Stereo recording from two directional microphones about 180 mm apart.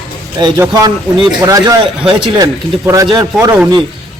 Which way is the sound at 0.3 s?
20° right (ahead or behind).